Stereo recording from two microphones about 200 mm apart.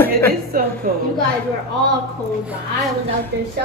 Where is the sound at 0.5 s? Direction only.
45° right (ahead or behind).